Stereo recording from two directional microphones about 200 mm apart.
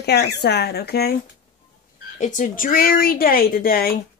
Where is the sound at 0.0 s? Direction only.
55° left (ahead or behind).